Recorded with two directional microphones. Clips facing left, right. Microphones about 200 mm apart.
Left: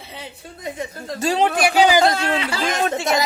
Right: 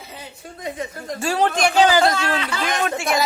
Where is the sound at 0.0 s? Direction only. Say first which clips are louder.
Left 1 dB; 30° left (ahead or behind).